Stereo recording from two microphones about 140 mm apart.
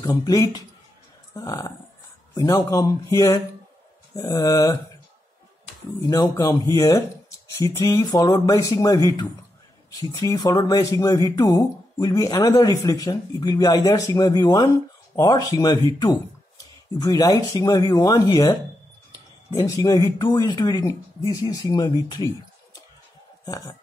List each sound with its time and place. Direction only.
0.0 s speech: 25° left (ahead or behind)
5.9 s speech: 25° left (ahead or behind)
19.6 s speech: 25° left (ahead or behind)
23.4 s speech: 25° left (ahead or behind)